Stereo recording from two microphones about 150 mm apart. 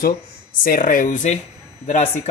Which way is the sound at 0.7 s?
70° left (ahead or behind).